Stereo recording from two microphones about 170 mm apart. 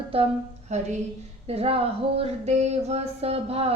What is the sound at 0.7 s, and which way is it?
A woman's voice, 40° right (ahead or behind).